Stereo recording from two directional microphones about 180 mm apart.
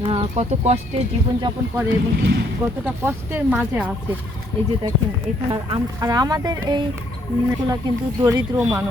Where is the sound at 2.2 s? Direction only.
65° right (ahead or behind).